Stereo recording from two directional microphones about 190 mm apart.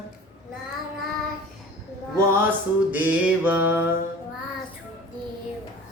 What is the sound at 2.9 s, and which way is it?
Mantra, 10° right (ahead or behind).